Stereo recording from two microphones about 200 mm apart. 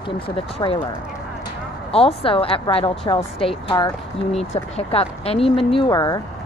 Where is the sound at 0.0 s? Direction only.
25° left (ahead or behind).